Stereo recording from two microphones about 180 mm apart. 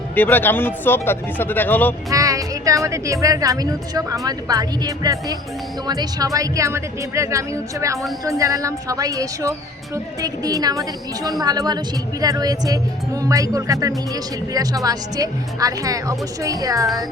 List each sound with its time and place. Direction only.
0.2 s speech: 10° left (ahead or behind)
2.0 s a woman's voice: 20° right (ahead or behind)